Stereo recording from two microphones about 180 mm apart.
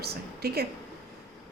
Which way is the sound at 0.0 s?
60° right (ahead or behind).